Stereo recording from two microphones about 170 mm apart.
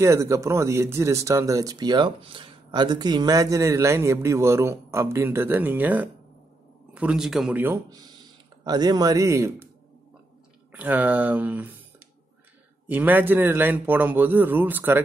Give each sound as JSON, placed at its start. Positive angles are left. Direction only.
{"t": 0.0, "sound": "speech", "side_deg": -15}
{"t": 8.6, "sound": "a man's voice", "side_deg": -25}
{"t": 10.7, "sound": "speech", "side_deg": -10}
{"t": 12.8, "sound": "speech", "side_deg": -10}